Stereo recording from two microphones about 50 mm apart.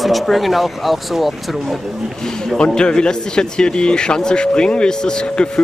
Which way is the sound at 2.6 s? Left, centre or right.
Centre.